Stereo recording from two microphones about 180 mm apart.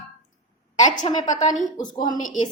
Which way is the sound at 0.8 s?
25° left (ahead or behind).